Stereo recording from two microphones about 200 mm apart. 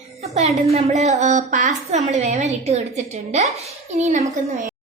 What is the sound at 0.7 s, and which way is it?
A woman's voice, 30° right (ahead or behind).